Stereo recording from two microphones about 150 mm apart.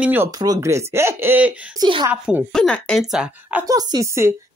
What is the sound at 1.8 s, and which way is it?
Speech, 30° right (ahead or behind).